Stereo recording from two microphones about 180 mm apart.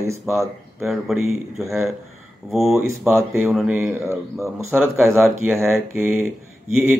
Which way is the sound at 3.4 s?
5° right (ahead or behind).